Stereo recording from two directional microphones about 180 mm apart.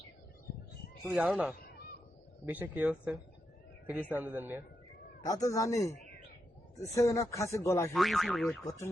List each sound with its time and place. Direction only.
1.1 s speech: 5° right (ahead or behind)
5.2 s speech: 20° left (ahead or behind)
7.9 s speech: centre (ahead or behind)